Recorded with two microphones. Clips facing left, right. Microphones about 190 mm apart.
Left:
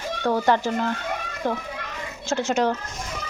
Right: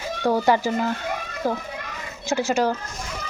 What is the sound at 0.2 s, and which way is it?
Speech, 10° right (ahead or behind).